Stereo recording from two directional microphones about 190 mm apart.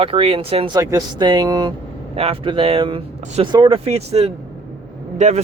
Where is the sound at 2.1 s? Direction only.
30° right (ahead or behind).